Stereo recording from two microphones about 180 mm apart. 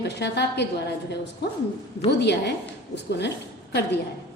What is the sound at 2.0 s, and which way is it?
A woman's voice, 70° left (ahead or behind).